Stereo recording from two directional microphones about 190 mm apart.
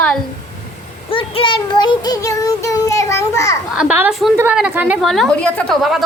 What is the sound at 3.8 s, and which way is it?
A woman's voice, 10° right (ahead or behind).